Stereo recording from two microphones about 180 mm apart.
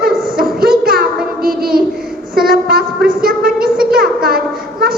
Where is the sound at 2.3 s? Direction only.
55° right (ahead or behind).